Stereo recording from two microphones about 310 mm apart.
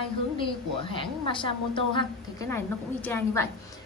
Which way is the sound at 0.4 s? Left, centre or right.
Centre.